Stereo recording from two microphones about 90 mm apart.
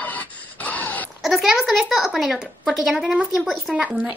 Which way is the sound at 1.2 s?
Centre (ahead or behind).